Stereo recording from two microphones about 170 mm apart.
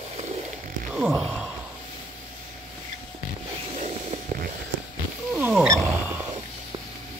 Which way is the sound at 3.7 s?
40° right (ahead or behind).